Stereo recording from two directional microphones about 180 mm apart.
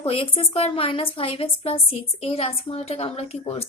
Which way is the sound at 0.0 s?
30° left (ahead or behind).